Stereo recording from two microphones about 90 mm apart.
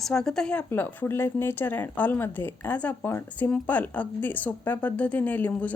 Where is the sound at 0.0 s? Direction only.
5° left (ahead or behind).